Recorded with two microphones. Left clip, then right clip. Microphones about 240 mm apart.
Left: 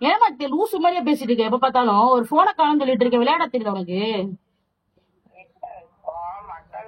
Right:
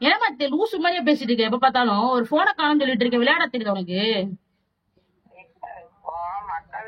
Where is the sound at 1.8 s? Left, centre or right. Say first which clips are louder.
Left 4 dB; right.